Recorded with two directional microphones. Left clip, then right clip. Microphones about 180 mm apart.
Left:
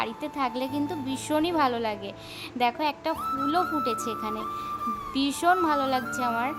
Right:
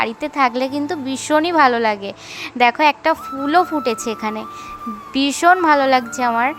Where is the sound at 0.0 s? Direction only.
15° right (ahead or behind).